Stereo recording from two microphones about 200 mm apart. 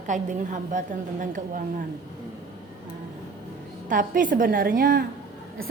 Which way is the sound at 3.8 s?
40° right (ahead or behind).